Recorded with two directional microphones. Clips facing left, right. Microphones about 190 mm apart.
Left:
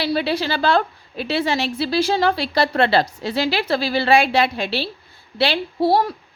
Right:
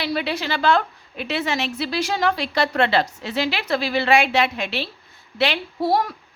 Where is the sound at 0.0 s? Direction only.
35° left (ahead or behind).